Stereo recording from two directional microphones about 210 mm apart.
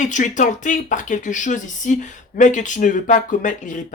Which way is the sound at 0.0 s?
35° left (ahead or behind).